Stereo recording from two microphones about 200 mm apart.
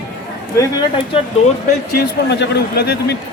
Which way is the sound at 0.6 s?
20° left (ahead or behind).